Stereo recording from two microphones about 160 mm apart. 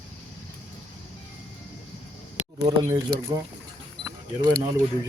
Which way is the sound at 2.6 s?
25° right (ahead or behind).